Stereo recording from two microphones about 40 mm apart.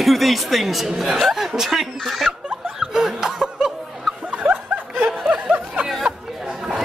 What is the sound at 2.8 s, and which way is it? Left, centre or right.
Chuckle, centre.